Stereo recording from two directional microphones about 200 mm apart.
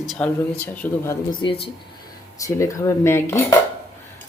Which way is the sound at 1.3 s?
25° left (ahead or behind).